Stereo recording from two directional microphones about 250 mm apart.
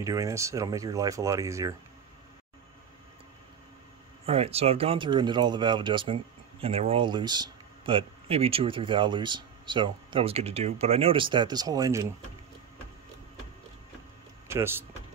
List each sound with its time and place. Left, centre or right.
0.0 s speech: centre
4.3 s speech: right
14.5 s speech: centre